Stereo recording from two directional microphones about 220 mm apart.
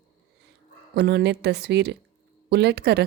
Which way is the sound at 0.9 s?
50° right (ahead or behind).